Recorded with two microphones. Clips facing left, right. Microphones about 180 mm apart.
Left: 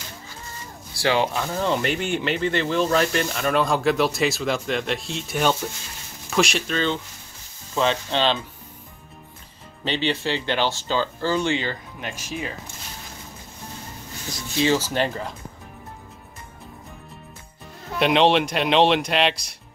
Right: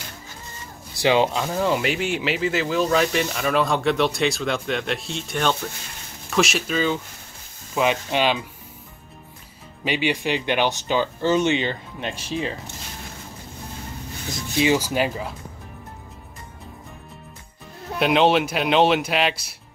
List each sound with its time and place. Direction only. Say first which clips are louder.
0.9 s speech: right 3 dB; 20° right (ahead or behind)
9.8 s speech: right 1 dB; 10° right (ahead or behind); by 12.5 s 30° right (ahead or behind)
14.3 s speech: right 1 dB; 15° right (ahead or behind)
17.9 s speech: even; centre (ahead or behind)